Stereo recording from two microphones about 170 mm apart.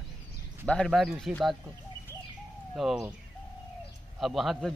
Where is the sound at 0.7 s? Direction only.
Centre (ahead or behind).